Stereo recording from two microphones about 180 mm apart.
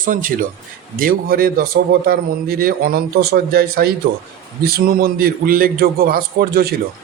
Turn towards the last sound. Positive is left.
turn(degrees=-60)  # may be behind; listen again after turning